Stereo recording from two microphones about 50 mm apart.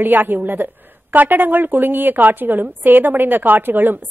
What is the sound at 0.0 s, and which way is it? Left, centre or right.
A woman's voice, right.